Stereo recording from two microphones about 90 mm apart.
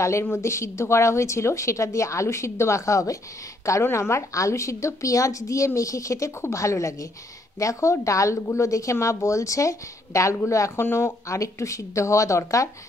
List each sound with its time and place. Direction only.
0.0 s a woman's voice: 30° left (ahead or behind)